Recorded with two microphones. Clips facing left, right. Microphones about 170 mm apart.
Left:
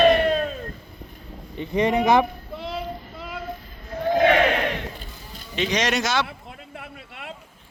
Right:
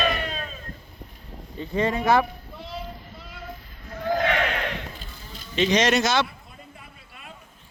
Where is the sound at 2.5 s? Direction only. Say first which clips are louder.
Left 6 dB; 90° left.